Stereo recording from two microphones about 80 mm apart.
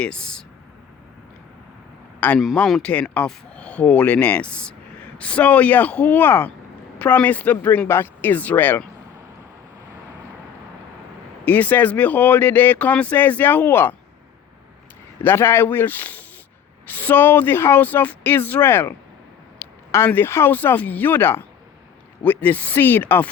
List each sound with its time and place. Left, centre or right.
0.0 s speech: centre
2.2 s speech: left
11.4 s speech: left
15.2 s speech: left
20.1 s speech: left